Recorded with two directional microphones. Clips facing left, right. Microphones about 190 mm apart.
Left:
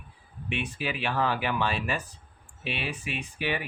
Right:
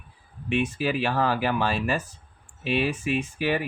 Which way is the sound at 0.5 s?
40° right (ahead or behind).